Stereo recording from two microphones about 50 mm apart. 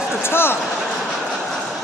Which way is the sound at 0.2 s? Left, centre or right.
Left.